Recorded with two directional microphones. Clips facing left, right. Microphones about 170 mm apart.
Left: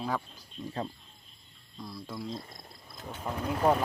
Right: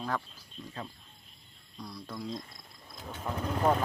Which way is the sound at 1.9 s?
Centre (ahead or behind).